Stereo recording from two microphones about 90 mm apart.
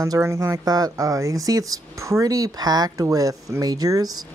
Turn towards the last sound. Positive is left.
turn(degrees=-45)  # may be behind; listen again after turning